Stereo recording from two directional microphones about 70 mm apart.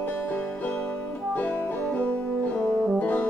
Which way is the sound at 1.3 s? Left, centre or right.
Left.